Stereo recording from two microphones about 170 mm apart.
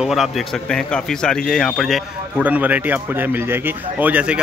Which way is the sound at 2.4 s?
10° right (ahead or behind).